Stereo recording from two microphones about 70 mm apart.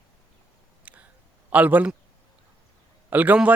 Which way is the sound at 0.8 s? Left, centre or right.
Right.